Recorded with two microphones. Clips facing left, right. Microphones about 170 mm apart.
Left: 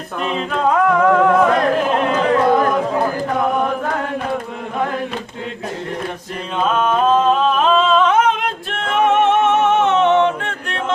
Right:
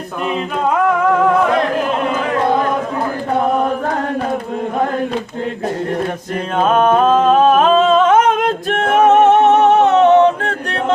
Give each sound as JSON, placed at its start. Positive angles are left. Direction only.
{"t": 6.7, "sound": "humming", "side_deg": -50}